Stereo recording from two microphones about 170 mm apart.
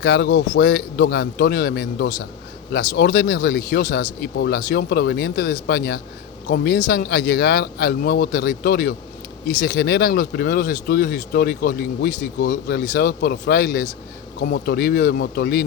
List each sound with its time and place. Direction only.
0.0 s a man's voice: 90° left; by 6.0 s 65° left (ahead or behind)
6.5 s speech: 80° left
9.6 s speech: 80° left